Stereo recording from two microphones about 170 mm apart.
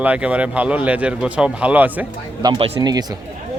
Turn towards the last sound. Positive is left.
turn(degrees=-25)  # may be behind; listen again after turning